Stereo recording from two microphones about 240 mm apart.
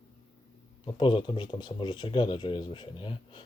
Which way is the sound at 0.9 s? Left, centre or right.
Centre.